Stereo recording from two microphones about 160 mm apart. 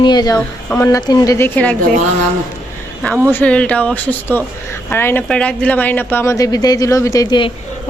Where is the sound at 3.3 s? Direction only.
10° left (ahead or behind).